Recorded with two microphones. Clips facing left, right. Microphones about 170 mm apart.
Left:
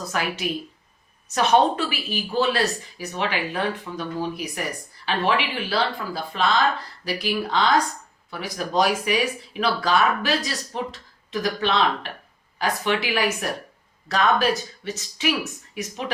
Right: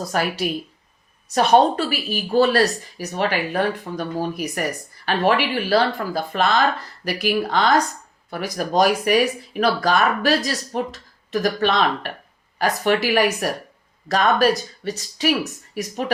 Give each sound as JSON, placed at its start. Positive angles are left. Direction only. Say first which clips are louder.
{"t": 0.1, "sound": "speech", "louder": "right 3 dB", "side_deg": -40}